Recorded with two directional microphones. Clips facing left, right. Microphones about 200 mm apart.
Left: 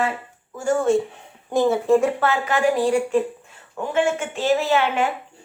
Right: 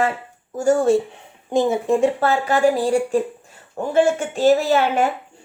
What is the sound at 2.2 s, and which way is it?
Speech, 35° right (ahead or behind).